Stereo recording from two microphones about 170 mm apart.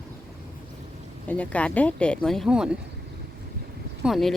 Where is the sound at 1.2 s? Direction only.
10° left (ahead or behind).